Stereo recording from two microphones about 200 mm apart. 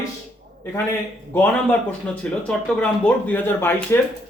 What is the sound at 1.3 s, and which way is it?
Speech, 10° left (ahead or behind).